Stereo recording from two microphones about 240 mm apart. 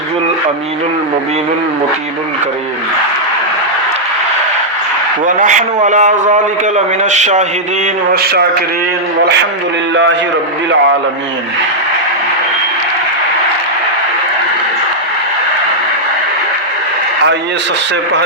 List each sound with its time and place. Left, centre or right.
5.2 s a man's voice: right
8.1 s a man's voice: right